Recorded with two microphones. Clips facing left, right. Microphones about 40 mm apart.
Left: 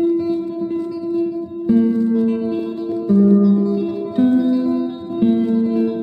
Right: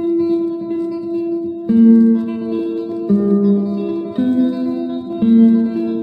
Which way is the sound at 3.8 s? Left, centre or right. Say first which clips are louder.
Left 1 dB; centre.